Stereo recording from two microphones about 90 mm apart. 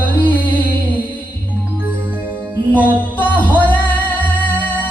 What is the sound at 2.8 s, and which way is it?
Music, 20° left (ahead or behind).